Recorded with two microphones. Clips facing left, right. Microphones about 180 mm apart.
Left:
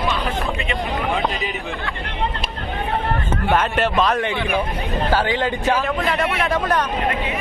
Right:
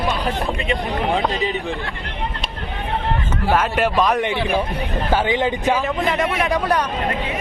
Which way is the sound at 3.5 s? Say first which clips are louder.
Right 1 dB; 10° right (ahead or behind).